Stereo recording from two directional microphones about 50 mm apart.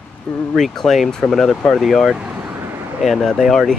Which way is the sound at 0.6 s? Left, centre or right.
Centre.